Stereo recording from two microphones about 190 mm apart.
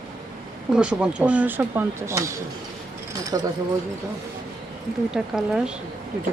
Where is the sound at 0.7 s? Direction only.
5° right (ahead or behind).